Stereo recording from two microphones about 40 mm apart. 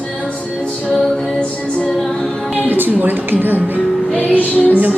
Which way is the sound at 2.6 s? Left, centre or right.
Right.